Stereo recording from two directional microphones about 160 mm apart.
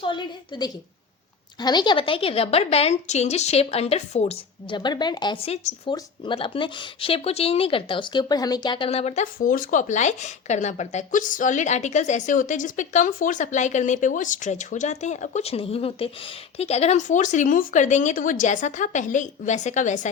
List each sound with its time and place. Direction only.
0.0 s a woman's voice: 30° left (ahead or behind)
4.8 s speech: 25° left (ahead or behind); by 20.1 s 50° left (ahead or behind)